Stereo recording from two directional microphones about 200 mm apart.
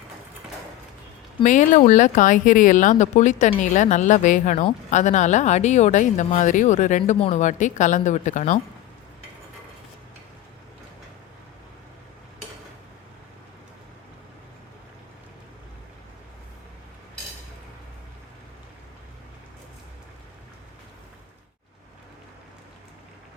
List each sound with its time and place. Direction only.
1.5 s speech: 40° left (ahead or behind)